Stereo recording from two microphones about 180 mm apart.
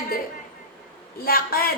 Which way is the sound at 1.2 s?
55° left (ahead or behind).